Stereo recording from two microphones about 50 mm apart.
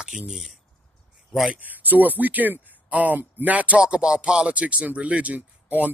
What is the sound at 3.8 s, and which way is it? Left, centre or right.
Speech, centre.